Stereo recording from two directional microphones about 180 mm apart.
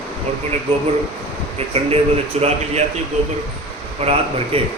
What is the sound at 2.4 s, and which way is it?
Speech, 35° right (ahead or behind).